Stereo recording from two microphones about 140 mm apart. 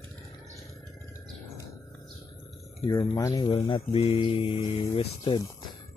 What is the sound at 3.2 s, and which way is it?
Speech, 25° left (ahead or behind).